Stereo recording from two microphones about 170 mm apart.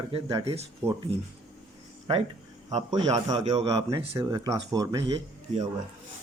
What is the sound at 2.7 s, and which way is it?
Speech, 25° right (ahead or behind).